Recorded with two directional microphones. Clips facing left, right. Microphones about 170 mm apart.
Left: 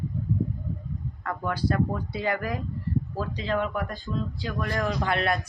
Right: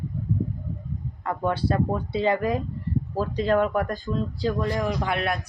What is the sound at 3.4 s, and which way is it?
Speech, 45° right (ahead or behind).